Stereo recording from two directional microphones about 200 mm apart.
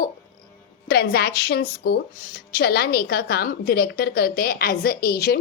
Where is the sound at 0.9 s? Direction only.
50° left (ahead or behind).